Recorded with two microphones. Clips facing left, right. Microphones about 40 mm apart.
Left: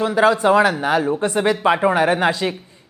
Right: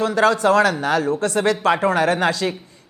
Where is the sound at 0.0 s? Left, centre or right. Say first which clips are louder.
Left 1 dB; centre.